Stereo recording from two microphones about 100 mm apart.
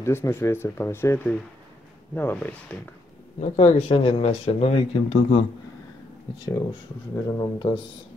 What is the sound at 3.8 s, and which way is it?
Speech, 75° left (ahead or behind).